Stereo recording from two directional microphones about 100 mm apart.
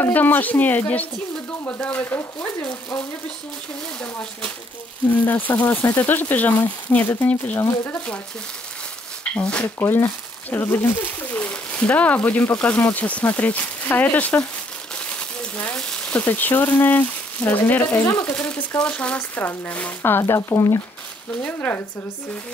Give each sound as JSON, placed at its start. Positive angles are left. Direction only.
{"t": 0.0, "sound": "speech", "side_deg": 20}
{"t": 4.0, "sound": "speech", "side_deg": 10}
{"t": 9.3, "sound": "speech", "side_deg": 10}
{"t": 9.8, "sound": "speech", "side_deg": 25}
{"t": 15.0, "sound": "a sound", "side_deg": 15}
{"t": 16.2, "sound": "speech", "side_deg": 20}
{"t": 21.4, "sound": "speech", "side_deg": 15}